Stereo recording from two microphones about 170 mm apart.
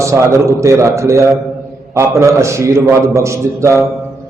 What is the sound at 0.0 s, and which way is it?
A man's voice, 15° right (ahead or behind).